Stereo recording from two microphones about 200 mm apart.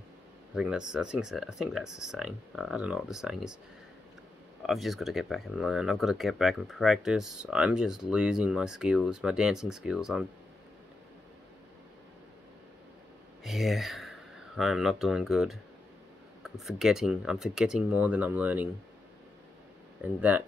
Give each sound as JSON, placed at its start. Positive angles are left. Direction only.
{"t": 0.6, "sound": "speech", "side_deg": -5}
{"t": 4.6, "sound": "speech", "side_deg": 0}
{"t": 13.4, "sound": "speech", "side_deg": 0}
{"t": 20.0, "sound": "speech", "side_deg": -10}